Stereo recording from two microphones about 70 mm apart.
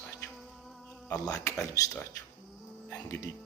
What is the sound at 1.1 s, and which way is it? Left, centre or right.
Speech, left.